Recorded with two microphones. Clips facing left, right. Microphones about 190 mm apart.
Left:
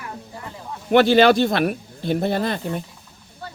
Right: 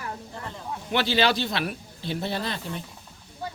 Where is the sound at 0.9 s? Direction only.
50° left (ahead or behind).